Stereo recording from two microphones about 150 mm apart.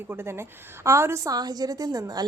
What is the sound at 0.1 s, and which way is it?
A woman's voice, 15° right (ahead or behind).